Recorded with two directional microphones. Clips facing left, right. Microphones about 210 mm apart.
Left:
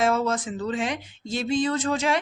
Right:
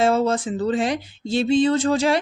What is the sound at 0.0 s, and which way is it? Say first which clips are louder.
A woman's voice: right 4 dB; 30° right (ahead or behind).